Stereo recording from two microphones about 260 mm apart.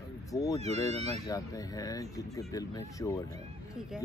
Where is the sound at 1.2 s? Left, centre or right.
Centre.